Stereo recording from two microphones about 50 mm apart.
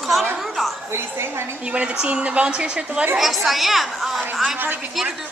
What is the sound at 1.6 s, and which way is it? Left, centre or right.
A woman's voice, right.